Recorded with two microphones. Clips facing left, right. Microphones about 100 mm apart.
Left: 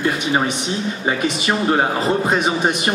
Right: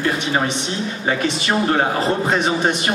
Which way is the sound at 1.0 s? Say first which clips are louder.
Even; 15° left (ahead or behind).